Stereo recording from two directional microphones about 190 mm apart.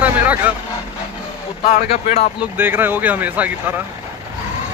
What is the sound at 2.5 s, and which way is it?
A man's voice, 10° right (ahead or behind).